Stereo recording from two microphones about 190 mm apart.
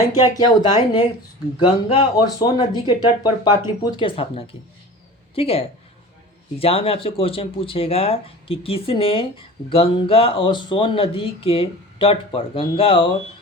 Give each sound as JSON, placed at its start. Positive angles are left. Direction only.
{"t": 0.3, "sound": "a woman's voice", "side_deg": 20}